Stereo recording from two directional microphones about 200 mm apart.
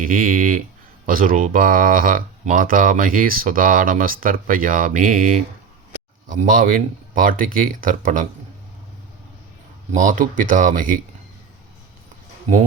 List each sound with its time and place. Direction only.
0.0 s speech: 45° right (ahead or behind)
9.9 s speech: 40° right (ahead or behind)